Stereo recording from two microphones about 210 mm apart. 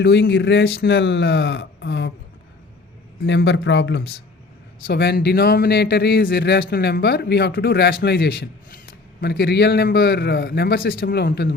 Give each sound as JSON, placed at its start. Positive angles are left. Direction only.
{"t": 0.0, "sound": "speech", "side_deg": 55}
{"t": 3.2, "sound": "speech", "side_deg": 60}